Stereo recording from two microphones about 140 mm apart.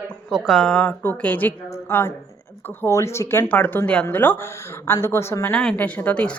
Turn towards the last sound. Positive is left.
turn(degrees=10)  # may be behind; listen again after turning